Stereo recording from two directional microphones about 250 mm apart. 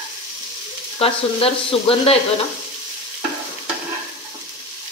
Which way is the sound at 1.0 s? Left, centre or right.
Left.